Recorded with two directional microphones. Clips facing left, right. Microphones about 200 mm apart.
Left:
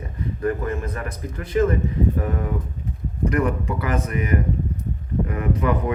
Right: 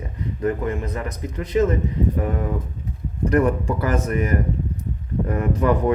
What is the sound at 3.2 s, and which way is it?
Speech, 35° right (ahead or behind).